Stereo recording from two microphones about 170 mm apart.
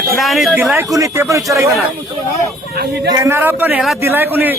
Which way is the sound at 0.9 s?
15° right (ahead or behind).